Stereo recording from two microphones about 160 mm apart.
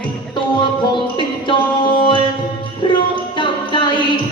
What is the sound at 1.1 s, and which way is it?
Music, 30° left (ahead or behind).